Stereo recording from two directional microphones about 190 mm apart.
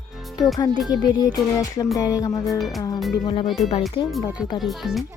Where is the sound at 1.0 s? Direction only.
20° left (ahead or behind).